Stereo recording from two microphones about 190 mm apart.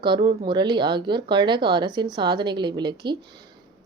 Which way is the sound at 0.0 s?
25° right (ahead or behind).